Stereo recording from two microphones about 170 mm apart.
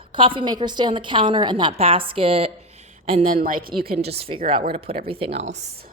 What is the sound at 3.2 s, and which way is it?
Speech, 55° right (ahead or behind).